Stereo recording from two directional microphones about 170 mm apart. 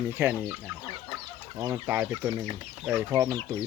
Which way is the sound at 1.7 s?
10° right (ahead or behind).